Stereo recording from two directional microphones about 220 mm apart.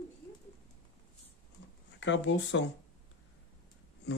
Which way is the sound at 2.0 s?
55° left (ahead or behind).